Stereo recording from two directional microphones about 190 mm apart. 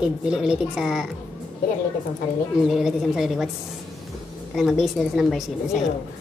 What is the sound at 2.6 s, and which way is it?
Speech, centre (ahead or behind).